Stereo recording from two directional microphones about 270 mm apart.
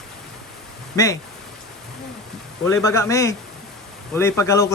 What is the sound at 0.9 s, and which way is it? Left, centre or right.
Speech, centre.